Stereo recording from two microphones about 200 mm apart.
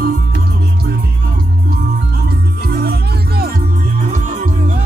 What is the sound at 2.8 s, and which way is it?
Music, 50° right (ahead or behind).